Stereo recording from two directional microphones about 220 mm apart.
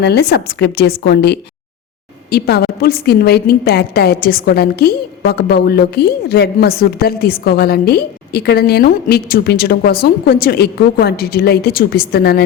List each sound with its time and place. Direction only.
0.0 s a woman's voice: 45° left (ahead or behind)